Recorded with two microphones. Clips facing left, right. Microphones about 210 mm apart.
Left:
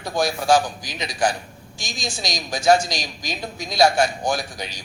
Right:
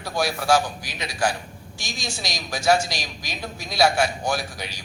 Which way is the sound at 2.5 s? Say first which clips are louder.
Left 3 dB; 5° right (ahead or behind).